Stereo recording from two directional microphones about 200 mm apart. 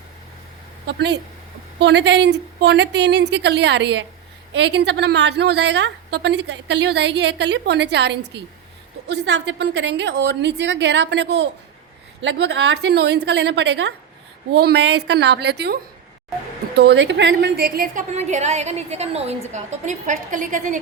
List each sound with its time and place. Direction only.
0.9 s a woman's voice: 60° right (ahead or behind); by 20.7 s 40° right (ahead or behind)